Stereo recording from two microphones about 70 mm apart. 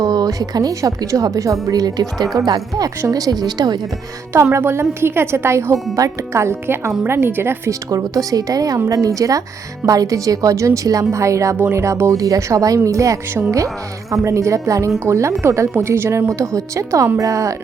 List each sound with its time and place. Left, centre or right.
0.0 s a woman's voice: right
4.5 s speech: right
7.7 s a woman's voice: right